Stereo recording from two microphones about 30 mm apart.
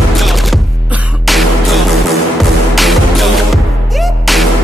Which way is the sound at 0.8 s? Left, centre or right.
Right.